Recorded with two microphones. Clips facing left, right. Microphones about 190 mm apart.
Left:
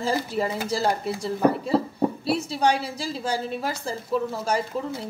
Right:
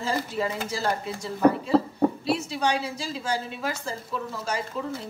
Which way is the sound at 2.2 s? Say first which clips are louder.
Left 3 dB; 35° left (ahead or behind).